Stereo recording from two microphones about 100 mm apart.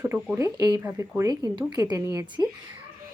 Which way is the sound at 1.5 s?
45° right (ahead or behind).